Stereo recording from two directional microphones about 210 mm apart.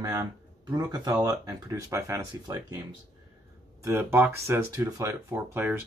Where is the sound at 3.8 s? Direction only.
10° right (ahead or behind).